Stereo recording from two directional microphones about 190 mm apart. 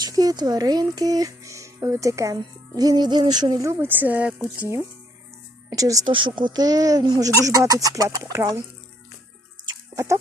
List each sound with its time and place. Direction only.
0.0 s speech: 20° right (ahead or behind)
5.7 s speech: 20° right (ahead or behind)
9.9 s chicken: 15° right (ahead or behind)